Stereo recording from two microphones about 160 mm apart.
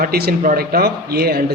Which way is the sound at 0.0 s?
75° right (ahead or behind).